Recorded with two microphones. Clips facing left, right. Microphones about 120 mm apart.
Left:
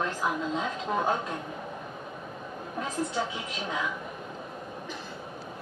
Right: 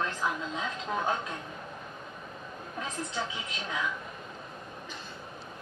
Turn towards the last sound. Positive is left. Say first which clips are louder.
# left 2 dB
turn(degrees=10)  # may be behind; listen again after turning